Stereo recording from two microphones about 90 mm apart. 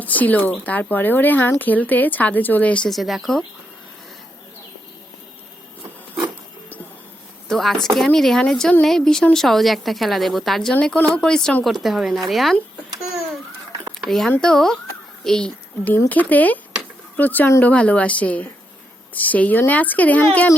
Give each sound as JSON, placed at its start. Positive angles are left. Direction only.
{"t": 0.0, "sound": "speech", "side_deg": 20}
{"t": 2.9, "sound": "a woman's voice", "side_deg": 0}
{"t": 7.4, "sound": "a woman's voice", "side_deg": 5}
{"t": 14.4, "sound": "speech", "side_deg": 5}
{"t": 16.0, "sound": "speech", "side_deg": 20}